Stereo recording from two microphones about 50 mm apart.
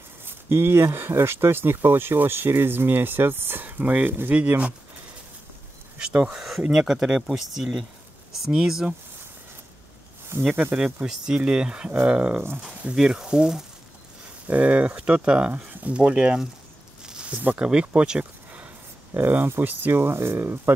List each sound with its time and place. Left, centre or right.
0.2 s speech: right
6.2 s speech: centre
10.5 s speech: right
11.1 s speech: centre
12.9 s speech: centre
14.5 s speech: right
17.0 s a sound: centre
17.3 s speech: right
17.6 s speech: centre
19.1 s speech: right